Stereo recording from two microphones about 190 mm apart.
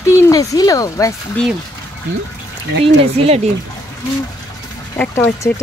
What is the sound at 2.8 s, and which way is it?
Speech, 30° right (ahead or behind).